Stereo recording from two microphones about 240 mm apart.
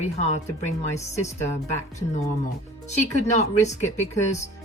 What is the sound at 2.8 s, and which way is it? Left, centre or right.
Speech, left.